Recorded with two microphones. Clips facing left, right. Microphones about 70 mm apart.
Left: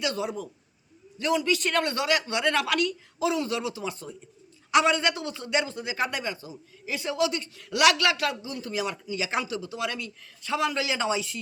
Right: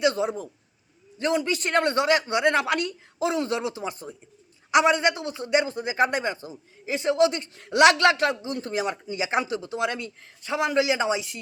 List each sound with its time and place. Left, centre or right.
0.0 s a man's voice: right